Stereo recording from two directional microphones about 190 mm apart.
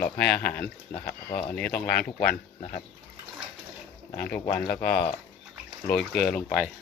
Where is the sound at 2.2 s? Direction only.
45° left (ahead or behind).